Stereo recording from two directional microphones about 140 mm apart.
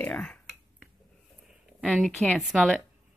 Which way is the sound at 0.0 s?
10° left (ahead or behind).